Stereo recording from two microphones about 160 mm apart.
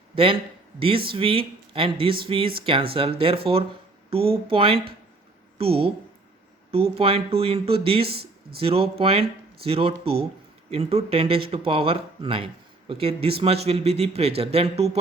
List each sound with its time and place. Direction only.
0.8 s speech: 35° right (ahead or behind)
8.0 s speech: 75° right (ahead or behind)
8.5 s speech: 35° right (ahead or behind)